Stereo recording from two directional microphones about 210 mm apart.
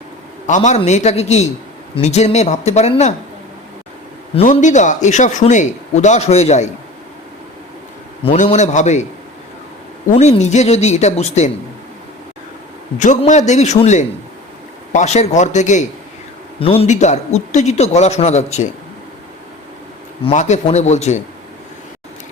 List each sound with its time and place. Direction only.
0.4 s a man's voice: 35° left (ahead or behind)
4.4 s a man's voice: 30° left (ahead or behind)
8.2 s a man's voice: 30° left (ahead or behind)
10.1 s a man's voice: 30° left (ahead or behind)
13.0 s a man's voice: 35° left (ahead or behind)
20.2 s a man's voice: 35° left (ahead or behind)